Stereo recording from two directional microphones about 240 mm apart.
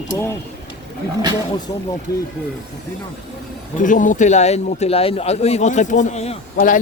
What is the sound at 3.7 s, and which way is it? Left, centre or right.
A man's voice, left.